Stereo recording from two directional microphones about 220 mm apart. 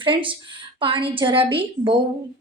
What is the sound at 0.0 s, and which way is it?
A woman's voice, 20° right (ahead or behind).